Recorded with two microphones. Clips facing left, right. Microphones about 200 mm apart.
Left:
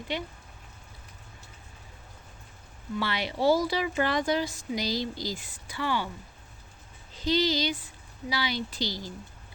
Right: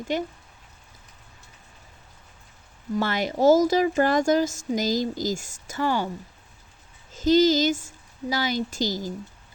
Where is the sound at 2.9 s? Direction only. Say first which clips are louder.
Right 6 dB; 45° right (ahead or behind).